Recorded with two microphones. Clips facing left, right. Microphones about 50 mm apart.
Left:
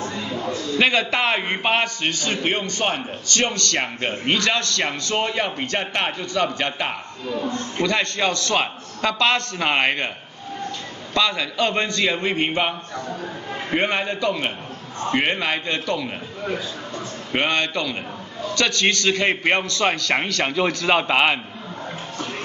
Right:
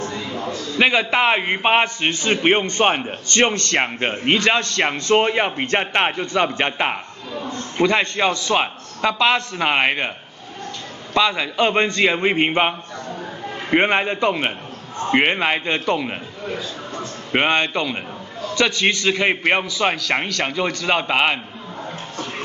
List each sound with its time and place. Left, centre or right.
0.7 s a man's voice: centre
11.1 s a man's voice: centre
17.3 s a man's voice: right; by 21.4 s centre